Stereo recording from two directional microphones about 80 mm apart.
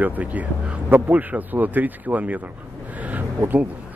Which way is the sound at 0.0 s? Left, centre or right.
Right.